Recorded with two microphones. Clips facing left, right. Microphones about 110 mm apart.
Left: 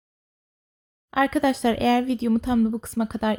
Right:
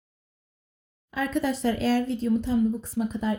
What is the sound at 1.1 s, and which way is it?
Speech, 90° left.